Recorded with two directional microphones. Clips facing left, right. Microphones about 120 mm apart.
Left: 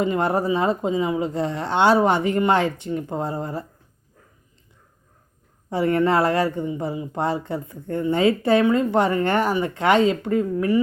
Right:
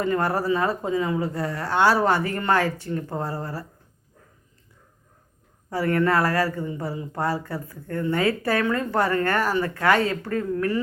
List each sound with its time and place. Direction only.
0.0 s speech: 20° left (ahead or behind)
5.7 s speech: 20° left (ahead or behind)